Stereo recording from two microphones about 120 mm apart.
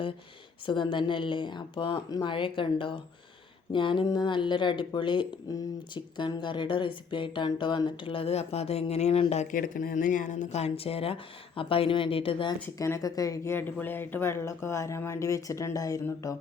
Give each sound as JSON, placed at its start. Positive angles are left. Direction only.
{"t": 0.6, "sound": "speech", "side_deg": 40}
{"t": 9.3, "sound": "speech", "side_deg": 80}
{"t": 12.8, "sound": "speech", "side_deg": 30}